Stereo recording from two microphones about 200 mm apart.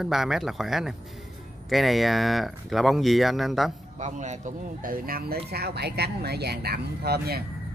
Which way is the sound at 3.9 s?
35° right (ahead or behind).